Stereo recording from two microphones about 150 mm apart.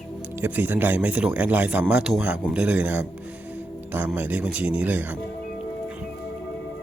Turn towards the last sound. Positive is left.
turn(degrees=-10)  # may be behind; listen again after turning